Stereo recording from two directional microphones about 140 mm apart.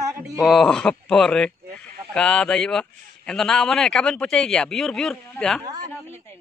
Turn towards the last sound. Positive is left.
turn(degrees=5)  # may be behind; listen again after turning